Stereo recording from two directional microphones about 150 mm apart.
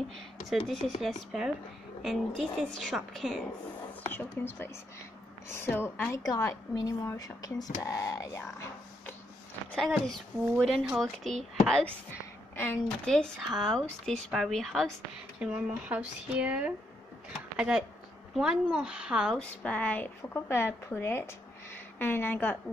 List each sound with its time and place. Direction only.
0.5 s speech: centre (ahead or behind)
4.1 s a woman's voice: 15° left (ahead or behind)
9.7 s speech: centre (ahead or behind)
13.6 s speech: 5° left (ahead or behind)
19.6 s speech: 10° left (ahead or behind)